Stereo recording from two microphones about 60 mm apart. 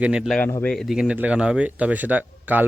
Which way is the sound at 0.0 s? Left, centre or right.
Centre.